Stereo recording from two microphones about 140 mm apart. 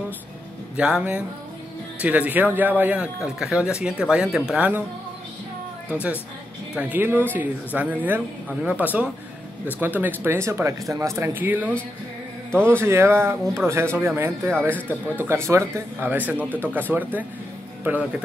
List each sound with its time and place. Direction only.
0.7 s speech: 5° right (ahead or behind)
6.7 s speech: 10° right (ahead or behind)